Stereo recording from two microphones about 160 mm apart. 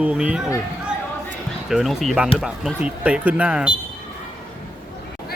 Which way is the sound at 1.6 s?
Centre (ahead or behind).